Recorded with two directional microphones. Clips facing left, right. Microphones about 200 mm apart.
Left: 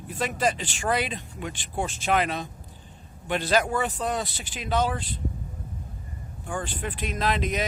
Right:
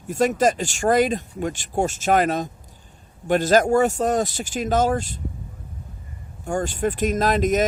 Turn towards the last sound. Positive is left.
turn(degrees=-45)  # may be behind; listen again after turning